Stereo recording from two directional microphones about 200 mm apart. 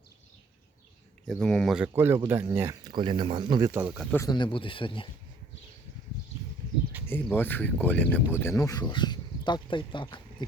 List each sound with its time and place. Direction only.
1.3 s speech: 5° left (ahead or behind)
4.1 s speech: 15° left (ahead or behind)
6.9 s bird: 10° right (ahead or behind)
7.3 s speech: 10° left (ahead or behind)